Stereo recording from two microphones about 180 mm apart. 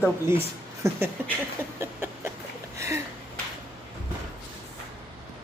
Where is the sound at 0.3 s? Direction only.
15° right (ahead or behind).